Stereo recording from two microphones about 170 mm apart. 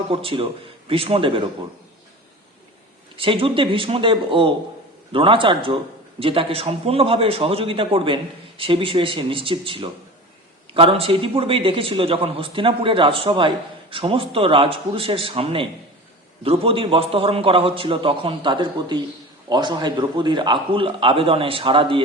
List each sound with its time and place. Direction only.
0.1 s a man's voice: 30° right (ahead or behind)
3.2 s a man's voice: 30° right (ahead or behind)